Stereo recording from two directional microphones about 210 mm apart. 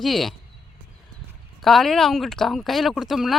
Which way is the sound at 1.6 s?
Centre (ahead or behind).